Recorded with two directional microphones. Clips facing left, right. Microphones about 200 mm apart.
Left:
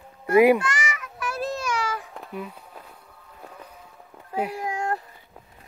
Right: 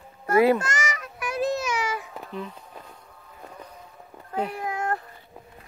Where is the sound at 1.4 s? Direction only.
10° right (ahead or behind).